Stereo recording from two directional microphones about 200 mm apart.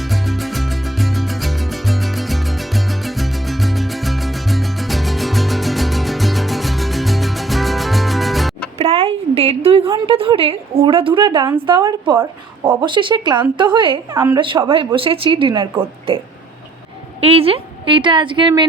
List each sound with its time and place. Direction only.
0.0 s music: centre (ahead or behind)
8.8 s a sound: 30° right (ahead or behind)
10.1 s a woman's voice: 25° right (ahead or behind)
14.1 s speech: 15° right (ahead or behind)
14.3 s a woman's voice: 25° right (ahead or behind)
17.2 s a woman's voice: 30° right (ahead or behind)